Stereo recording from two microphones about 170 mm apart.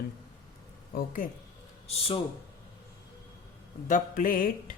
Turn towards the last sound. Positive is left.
turn(degrees=55)  # may be behind; listen again after turning